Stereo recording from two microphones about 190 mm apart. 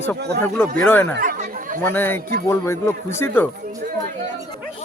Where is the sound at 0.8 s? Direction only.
10° left (ahead or behind).